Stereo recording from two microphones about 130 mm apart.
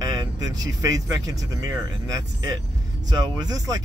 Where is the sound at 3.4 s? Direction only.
30° right (ahead or behind).